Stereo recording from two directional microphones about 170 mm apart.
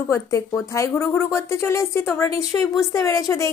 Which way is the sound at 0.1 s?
20° left (ahead or behind).